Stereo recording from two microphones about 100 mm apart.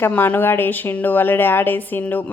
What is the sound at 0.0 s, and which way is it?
A woman's voice, 20° left (ahead or behind).